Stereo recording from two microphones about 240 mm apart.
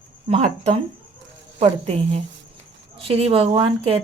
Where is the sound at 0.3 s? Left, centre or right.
Right.